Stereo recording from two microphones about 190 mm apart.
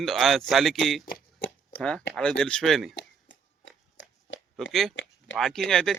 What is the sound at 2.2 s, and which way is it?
Speech, 5° left (ahead or behind).